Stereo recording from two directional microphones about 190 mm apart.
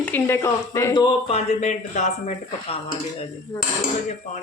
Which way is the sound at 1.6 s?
40° left (ahead or behind).